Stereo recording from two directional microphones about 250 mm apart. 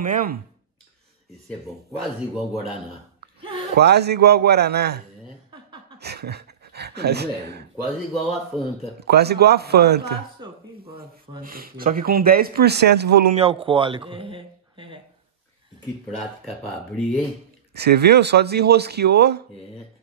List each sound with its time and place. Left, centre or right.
0.0 s speech: right
3.7 s speech: right
9.0 s speech: right
10.4 s speech: centre
11.0 s speech: right
13.3 s speech: right
16.1 s speech: centre
17.7 s speech: right